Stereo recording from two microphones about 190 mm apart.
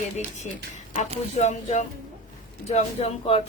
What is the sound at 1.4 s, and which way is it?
Speech, 40° left (ahead or behind).